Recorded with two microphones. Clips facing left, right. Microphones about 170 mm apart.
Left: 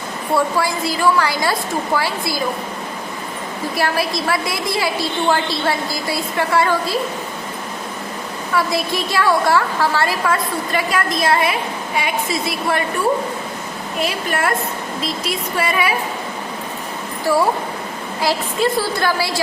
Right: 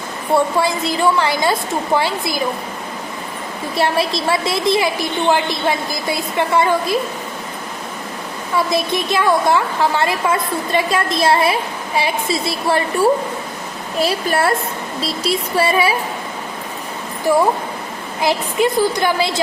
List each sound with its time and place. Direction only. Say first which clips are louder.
0.3 s a woman's voice: right 2 dB; 20° right (ahead or behind)
3.8 s a woman's voice: right 3 dB; 25° right (ahead or behind)
8.5 s a woman's voice: right 2 dB; 20° right (ahead or behind)
17.3 s a woman's voice: right 2 dB; 20° right (ahead or behind)